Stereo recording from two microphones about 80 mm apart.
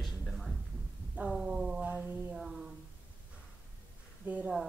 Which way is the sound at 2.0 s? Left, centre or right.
Right.